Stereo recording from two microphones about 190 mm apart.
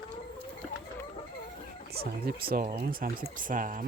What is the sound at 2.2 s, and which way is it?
Speech, 50° right (ahead or behind).